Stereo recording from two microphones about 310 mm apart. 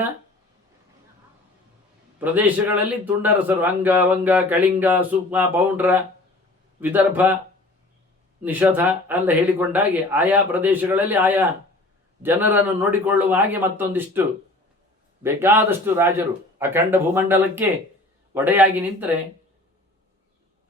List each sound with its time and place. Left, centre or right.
2.2 s a man's voice: centre
8.4 s a man's voice: centre